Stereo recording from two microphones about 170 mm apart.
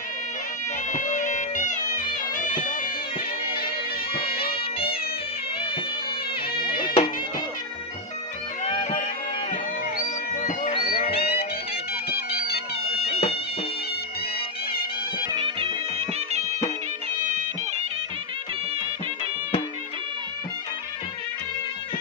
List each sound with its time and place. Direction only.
0.9 s music: 45° left (ahead or behind)
3.5 s bagpipes: 65° left (ahead or behind)
4.5 s music: 35° left (ahead or behind)
6.7 s music: 30° left (ahead or behind)
8.6 s music: 30° left (ahead or behind)
10.3 s music: 50° left (ahead or behind)
12.1 s bagpipes: 65° left (ahead or behind)
13.0 s bagpipes: 35° left (ahead or behind)
15.3 s music: 30° right (ahead or behind)